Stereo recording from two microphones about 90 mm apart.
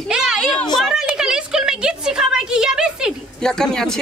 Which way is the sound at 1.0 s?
5° right (ahead or behind).